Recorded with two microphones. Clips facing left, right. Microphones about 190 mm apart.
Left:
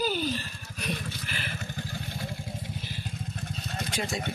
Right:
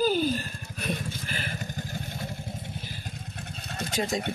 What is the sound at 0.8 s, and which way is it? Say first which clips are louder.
Vehicle: right 2 dB; 45° right (ahead or behind).